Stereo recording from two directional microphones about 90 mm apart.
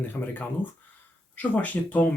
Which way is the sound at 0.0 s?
20° left (ahead or behind).